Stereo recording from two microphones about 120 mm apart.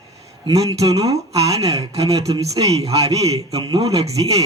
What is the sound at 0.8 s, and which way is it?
Speech, 30° right (ahead or behind).